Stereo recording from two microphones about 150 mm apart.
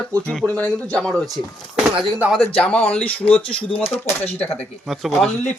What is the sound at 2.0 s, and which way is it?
Speech, 10° right (ahead or behind).